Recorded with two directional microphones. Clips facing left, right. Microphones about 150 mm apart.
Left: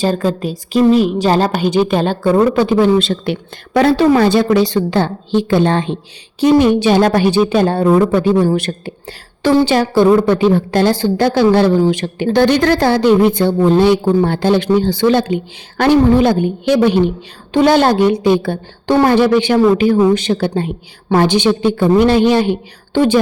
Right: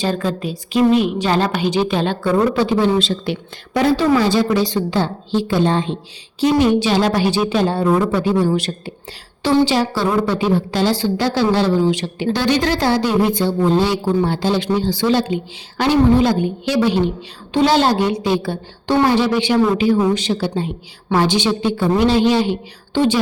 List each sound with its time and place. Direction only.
0.0 s a woman's voice: 40° left (ahead or behind); by 6.0 s 65° left (ahead or behind)
6.4 s a woman's voice: 55° left (ahead or behind)